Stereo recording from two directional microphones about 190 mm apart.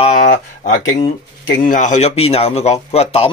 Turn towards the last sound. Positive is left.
turn(degrees=30)  # may be behind; listen again after turning